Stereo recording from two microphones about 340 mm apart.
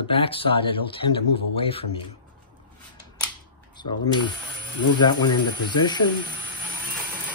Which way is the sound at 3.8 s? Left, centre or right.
Centre.